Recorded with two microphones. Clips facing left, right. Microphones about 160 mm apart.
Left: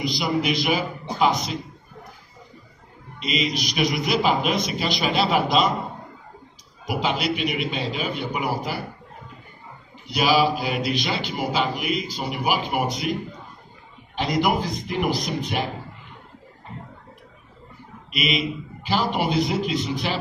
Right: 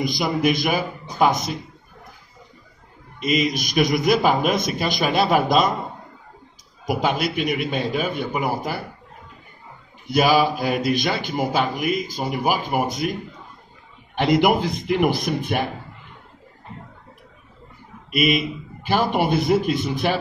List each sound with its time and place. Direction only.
0.0 s a man's voice: 50° right (ahead or behind)
3.2 s a man's voice: 50° right (ahead or behind)
6.9 s a man's voice: 50° right (ahead or behind)
10.0 s a man's voice: 50° right (ahead or behind)
14.1 s a man's voice: 60° right (ahead or behind)
18.1 s a man's voice: 50° right (ahead or behind)